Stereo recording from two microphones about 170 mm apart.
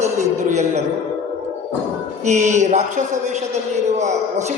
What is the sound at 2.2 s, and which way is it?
A man's voice, 45° right (ahead or behind).